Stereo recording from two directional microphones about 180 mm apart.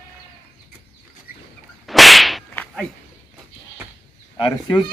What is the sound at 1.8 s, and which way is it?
Whip, centre (ahead or behind).